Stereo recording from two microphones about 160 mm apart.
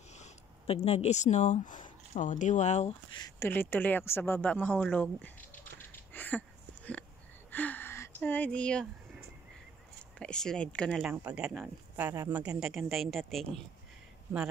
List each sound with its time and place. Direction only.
0.2 s speech: 40° left (ahead or behind)
3.1 s speech: 25° left (ahead or behind)
3.3 s a sound: 15° left (ahead or behind)
10.1 s speech: 5° left (ahead or behind)
11.0 s speech: 5° right (ahead or behind)